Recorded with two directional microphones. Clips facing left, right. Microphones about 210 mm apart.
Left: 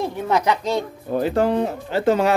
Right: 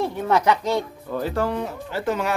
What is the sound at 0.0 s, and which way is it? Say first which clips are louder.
Speech: even; 20° left (ahead or behind).